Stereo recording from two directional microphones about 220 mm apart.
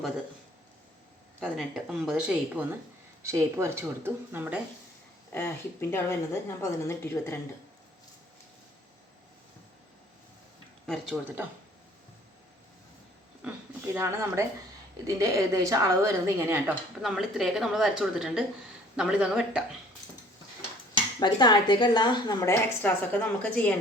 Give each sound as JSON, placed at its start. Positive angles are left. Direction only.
{"t": 1.4, "sound": "a woman's voice", "side_deg": 0}
{"t": 5.3, "sound": "a woman's voice", "side_deg": 10}
{"t": 10.8, "sound": "a woman's voice", "side_deg": 0}
{"t": 13.9, "sound": "a woman's voice", "side_deg": -10}
{"t": 20.9, "sound": "speech", "side_deg": 20}